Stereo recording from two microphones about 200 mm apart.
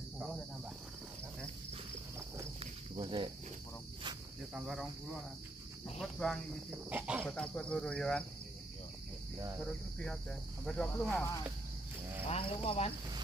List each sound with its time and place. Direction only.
3.0 s cricket: 25° right (ahead or behind)
4.4 s cricket: centre (ahead or behind)
5.9 s speech: centre (ahead or behind)
7.2 s speech: 5° left (ahead or behind)
9.7 s speech: 5° left (ahead or behind)
12.3 s speech: 30° left (ahead or behind)